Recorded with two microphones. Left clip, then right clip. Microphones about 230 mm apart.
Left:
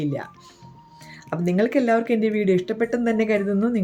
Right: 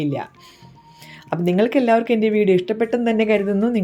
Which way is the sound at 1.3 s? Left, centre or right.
Centre.